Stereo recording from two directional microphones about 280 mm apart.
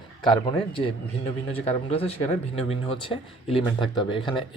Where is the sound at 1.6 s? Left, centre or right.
Left.